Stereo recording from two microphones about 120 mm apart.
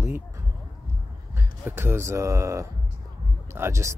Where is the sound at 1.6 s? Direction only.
20° right (ahead or behind).